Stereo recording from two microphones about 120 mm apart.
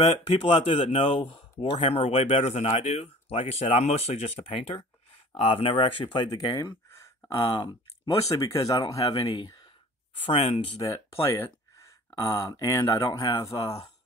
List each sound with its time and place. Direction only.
0.5 s speech: 45° left (ahead or behind)
6.3 s speech: 30° left (ahead or behind)
7.2 s speech: 40° left (ahead or behind)
8.4 s speech: 25° left (ahead or behind)
10.2 s speech: 55° left (ahead or behind)
10.8 s speech: 25° left (ahead or behind)